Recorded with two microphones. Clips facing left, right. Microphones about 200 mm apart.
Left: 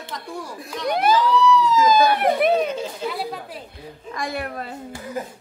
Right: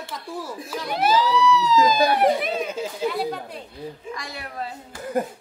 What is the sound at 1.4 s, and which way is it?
Speech, 50° left (ahead or behind).